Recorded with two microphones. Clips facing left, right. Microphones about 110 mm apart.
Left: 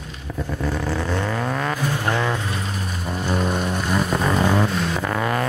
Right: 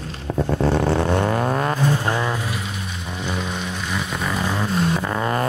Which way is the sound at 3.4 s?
50° left (ahead or behind).